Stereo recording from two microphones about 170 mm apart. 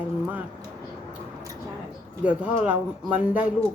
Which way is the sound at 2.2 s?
10° right (ahead or behind).